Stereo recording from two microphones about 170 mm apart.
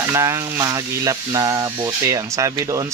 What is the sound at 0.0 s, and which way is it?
Speech, 20° right (ahead or behind).